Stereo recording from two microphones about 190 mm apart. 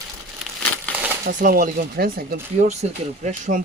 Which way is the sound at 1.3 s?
45° right (ahead or behind).